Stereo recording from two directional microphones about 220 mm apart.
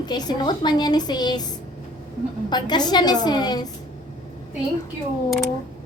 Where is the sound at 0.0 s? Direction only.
20° left (ahead or behind).